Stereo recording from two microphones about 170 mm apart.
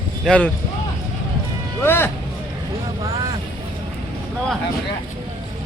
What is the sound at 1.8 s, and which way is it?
Speech, 15° left (ahead or behind).